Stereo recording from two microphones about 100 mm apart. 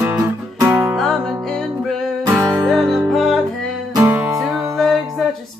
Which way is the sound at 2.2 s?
30° right (ahead or behind).